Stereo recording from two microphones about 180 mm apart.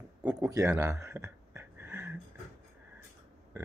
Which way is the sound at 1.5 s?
10° right (ahead or behind).